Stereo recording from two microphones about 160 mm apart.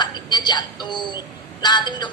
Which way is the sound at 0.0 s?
25° left (ahead or behind).